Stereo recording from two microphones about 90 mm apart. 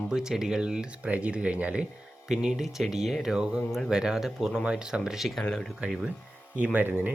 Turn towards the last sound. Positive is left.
turn(degrees=-20)  # may be behind; listen again after turning